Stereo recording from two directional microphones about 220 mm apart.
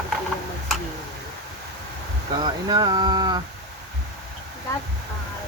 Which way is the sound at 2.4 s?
20° right (ahead or behind).